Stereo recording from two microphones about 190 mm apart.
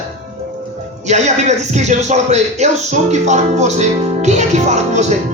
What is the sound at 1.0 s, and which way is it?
Music, 35° right (ahead or behind).